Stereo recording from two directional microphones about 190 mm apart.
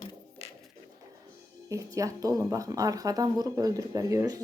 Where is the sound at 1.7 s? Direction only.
15° right (ahead or behind).